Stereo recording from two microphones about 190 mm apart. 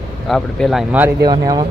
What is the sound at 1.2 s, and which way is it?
Speech, 20° right (ahead or behind).